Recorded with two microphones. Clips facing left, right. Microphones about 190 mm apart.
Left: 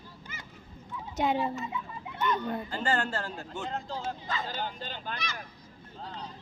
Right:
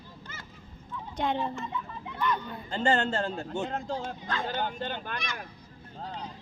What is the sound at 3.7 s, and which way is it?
A man's voice, 50° right (ahead or behind).